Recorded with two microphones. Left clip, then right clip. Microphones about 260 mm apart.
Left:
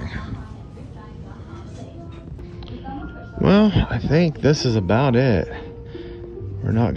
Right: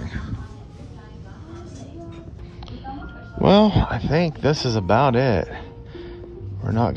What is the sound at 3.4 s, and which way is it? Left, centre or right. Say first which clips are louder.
Speech: right 2 dB; right.